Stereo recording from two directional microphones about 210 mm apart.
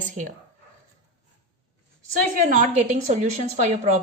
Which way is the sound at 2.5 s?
40° right (ahead or behind).